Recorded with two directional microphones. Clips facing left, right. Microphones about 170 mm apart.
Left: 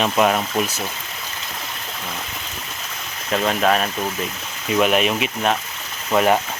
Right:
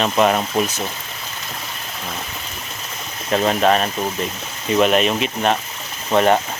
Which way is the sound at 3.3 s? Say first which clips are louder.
Right 2 dB; centre (ahead or behind).